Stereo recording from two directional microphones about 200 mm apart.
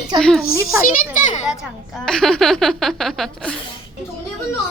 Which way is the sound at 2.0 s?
5° left (ahead or behind).